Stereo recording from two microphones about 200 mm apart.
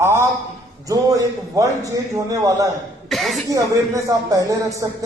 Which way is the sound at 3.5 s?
15° right (ahead or behind).